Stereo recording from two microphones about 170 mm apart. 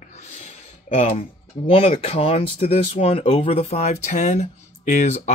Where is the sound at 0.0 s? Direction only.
40° left (ahead or behind).